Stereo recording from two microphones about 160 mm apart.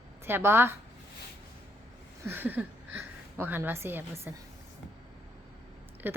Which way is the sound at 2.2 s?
15° right (ahead or behind).